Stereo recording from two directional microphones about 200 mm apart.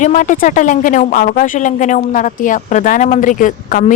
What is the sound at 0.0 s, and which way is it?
A woman's voice, 40° left (ahead or behind).